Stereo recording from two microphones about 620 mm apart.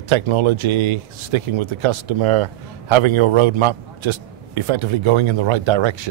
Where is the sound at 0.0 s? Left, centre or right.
Right.